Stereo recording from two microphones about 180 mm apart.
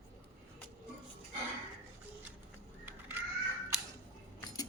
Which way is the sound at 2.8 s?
10° right (ahead or behind).